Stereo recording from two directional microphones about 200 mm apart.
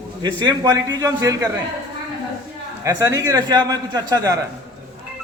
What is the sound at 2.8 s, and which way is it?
A man's voice, 15° right (ahead or behind).